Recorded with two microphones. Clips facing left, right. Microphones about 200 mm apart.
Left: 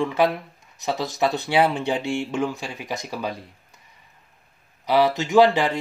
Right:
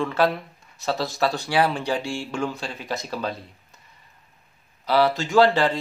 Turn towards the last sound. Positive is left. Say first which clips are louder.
# left 1 dB
turn(degrees=15)  # may be behind; listen again after turning